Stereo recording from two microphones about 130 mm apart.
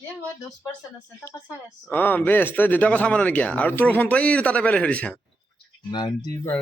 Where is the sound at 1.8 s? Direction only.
15° left (ahead or behind).